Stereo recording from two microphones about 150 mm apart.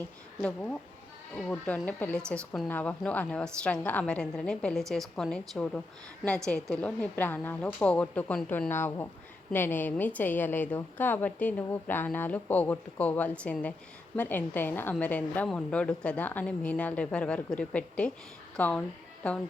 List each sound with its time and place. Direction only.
0.4 s a woman's voice: 10° left (ahead or behind)